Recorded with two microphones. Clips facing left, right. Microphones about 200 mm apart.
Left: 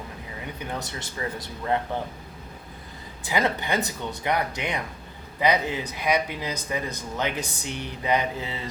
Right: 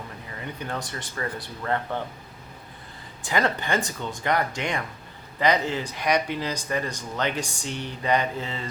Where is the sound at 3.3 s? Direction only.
15° left (ahead or behind).